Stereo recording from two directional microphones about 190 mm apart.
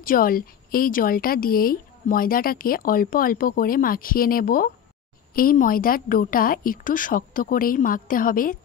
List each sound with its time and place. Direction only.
0.0 s speech: 50° left (ahead or behind)